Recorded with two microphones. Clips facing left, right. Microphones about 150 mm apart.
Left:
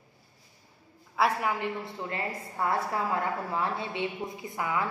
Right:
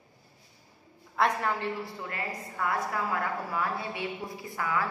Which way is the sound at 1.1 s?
5° left (ahead or behind).